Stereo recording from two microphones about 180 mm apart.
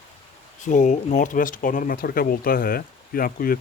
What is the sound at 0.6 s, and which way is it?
Speech, 45° left (ahead or behind).